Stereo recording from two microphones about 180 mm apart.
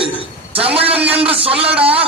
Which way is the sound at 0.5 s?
30° right (ahead or behind).